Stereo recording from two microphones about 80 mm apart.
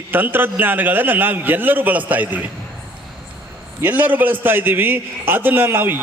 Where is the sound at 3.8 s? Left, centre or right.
Right.